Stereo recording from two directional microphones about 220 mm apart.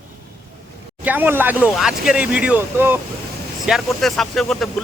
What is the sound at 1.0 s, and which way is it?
Speech, 10° right (ahead or behind).